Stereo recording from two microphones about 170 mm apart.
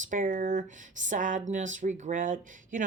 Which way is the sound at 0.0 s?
50° right (ahead or behind).